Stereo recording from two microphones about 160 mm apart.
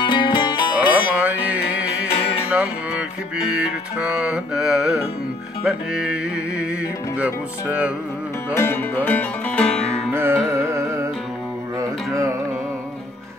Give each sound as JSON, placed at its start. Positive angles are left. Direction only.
{"t": 0.0, "sound": "music", "side_deg": 30}
{"t": 0.9, "sound": "music", "side_deg": -10}
{"t": 8.5, "sound": "music", "side_deg": 15}
{"t": 10.1, "sound": "music", "side_deg": -15}